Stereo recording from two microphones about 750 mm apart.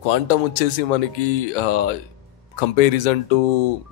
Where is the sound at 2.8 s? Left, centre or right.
Left.